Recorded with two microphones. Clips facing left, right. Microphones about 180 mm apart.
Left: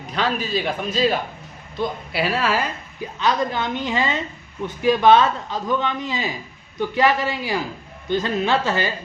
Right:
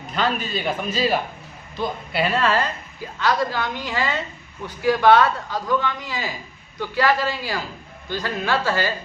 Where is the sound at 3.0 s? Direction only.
20° left (ahead or behind).